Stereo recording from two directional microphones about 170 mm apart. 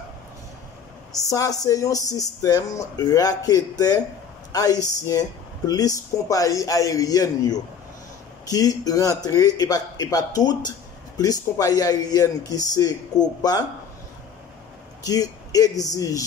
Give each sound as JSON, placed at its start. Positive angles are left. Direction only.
{"t": 1.3, "sound": "speech", "side_deg": 20}
{"t": 15.0, "sound": "speech", "side_deg": 20}